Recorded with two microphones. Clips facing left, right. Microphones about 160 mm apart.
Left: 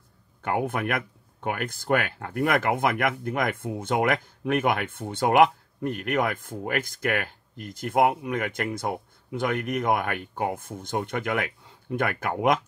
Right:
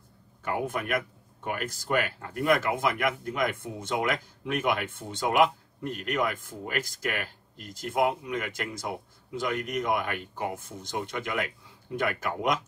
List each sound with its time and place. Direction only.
0.4 s speech: 55° left (ahead or behind)